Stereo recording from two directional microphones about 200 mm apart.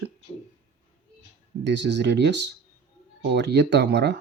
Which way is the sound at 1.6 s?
60° right (ahead or behind).